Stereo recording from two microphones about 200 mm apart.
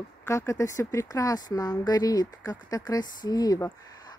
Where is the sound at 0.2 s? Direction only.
15° left (ahead or behind).